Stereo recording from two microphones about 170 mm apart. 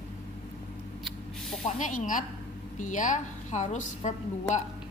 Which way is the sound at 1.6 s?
50° left (ahead or behind).